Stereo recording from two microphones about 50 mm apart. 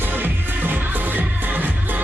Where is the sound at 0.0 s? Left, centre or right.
Right.